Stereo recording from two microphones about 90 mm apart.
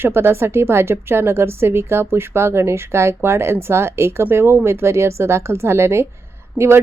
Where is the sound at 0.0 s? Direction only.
25° right (ahead or behind).